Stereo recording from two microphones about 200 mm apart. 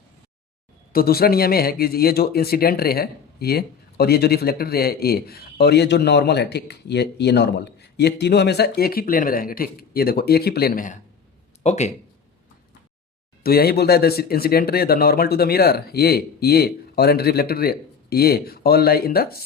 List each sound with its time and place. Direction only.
0.9 s speech: 50° left (ahead or behind)
11.6 s speech: 35° left (ahead or behind)
13.4 s speech: 50° left (ahead or behind)